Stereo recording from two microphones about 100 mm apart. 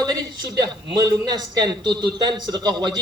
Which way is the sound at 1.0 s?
40° right (ahead or behind).